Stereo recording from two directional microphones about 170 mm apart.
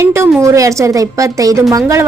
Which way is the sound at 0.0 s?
15° right (ahead or behind).